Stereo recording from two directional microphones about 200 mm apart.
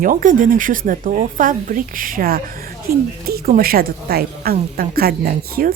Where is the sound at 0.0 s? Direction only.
40° right (ahead or behind).